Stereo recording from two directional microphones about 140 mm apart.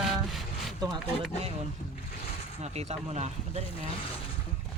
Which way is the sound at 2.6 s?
50° right (ahead or behind).